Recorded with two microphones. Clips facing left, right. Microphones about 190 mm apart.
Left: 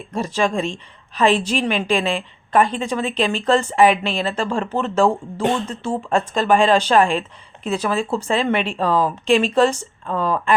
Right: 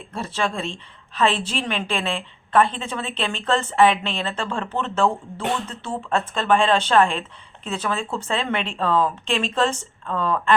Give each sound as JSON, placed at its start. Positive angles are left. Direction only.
{"t": 0.1, "sound": "a woman's voice", "side_deg": 15}
{"t": 5.4, "sound": "speech", "side_deg": 25}
{"t": 5.6, "sound": "a woman's voice", "side_deg": 10}